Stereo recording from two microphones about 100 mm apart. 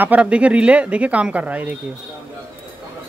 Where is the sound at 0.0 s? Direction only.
15° right (ahead or behind).